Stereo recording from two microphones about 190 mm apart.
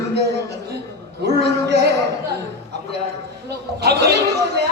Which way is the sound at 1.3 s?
60° right (ahead or behind).